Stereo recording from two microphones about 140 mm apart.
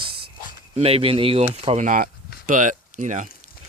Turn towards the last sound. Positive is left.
turn(degrees=-65)  # may be behind; listen again after turning